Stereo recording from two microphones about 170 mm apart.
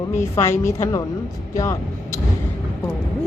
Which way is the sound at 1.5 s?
15° left (ahead or behind).